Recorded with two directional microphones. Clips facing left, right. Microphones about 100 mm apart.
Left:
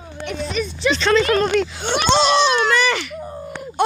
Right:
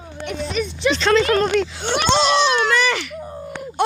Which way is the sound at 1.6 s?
10° left (ahead or behind).